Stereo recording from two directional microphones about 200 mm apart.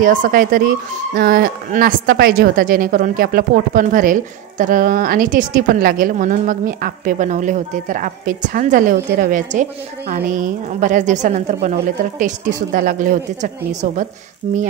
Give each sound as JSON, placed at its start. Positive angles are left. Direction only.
{"t": 0.0, "sound": "a woman's voice", "side_deg": -40}